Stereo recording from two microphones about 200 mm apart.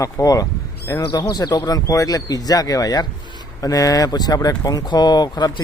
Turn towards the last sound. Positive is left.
turn(degrees=20)  # may be behind; listen again after turning